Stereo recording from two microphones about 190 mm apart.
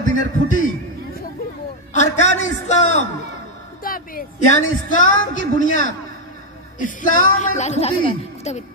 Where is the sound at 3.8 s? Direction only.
50° left (ahead or behind).